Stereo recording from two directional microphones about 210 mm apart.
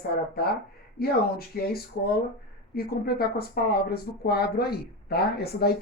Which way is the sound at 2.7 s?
45° left (ahead or behind).